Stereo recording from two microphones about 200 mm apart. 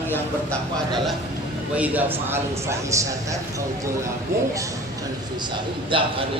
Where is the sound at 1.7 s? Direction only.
10° right (ahead or behind).